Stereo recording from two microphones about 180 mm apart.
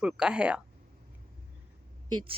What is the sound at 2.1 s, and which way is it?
Speech, 25° right (ahead or behind).